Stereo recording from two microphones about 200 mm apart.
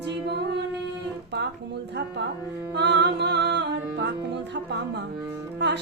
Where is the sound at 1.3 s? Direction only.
55° right (ahead or behind).